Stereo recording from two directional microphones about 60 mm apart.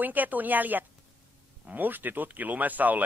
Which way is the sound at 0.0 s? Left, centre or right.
Right.